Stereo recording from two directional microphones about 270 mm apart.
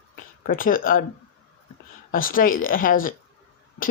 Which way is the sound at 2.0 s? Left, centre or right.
Left.